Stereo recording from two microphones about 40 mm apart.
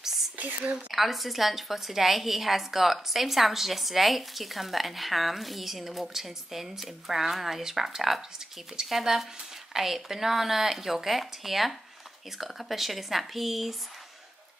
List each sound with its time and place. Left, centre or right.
0.4 s a woman's voice: right
0.9 s a woman's voice: centre